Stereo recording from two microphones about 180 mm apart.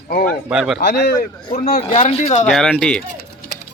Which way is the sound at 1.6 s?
50° left (ahead or behind).